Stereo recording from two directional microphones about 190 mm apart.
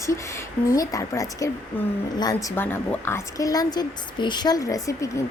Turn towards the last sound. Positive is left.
turn(degrees=15)  # may be behind; listen again after turning